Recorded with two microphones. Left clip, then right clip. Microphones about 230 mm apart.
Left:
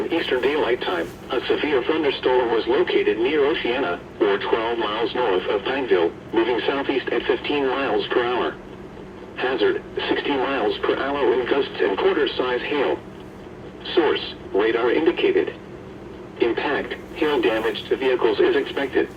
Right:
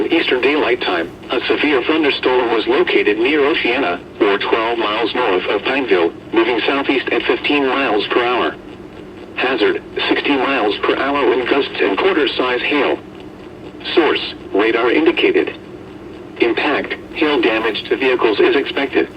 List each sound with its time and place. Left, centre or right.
0.1 s speech: right